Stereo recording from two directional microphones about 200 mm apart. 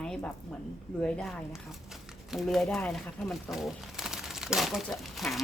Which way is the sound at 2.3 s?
Centre (ahead or behind).